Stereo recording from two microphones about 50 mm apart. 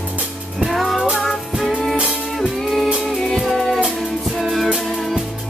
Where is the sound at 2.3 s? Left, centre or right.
Centre.